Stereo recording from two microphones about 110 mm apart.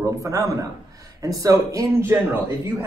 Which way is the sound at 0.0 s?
30° right (ahead or behind).